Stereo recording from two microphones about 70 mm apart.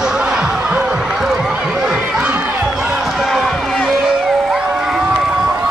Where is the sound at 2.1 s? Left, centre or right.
Centre.